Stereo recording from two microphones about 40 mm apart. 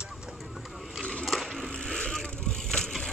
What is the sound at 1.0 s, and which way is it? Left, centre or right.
Skateboard, left.